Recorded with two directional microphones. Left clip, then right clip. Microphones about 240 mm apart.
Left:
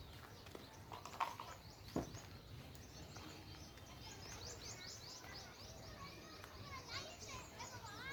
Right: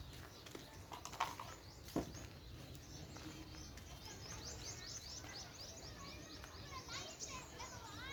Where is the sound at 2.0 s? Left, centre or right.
Right.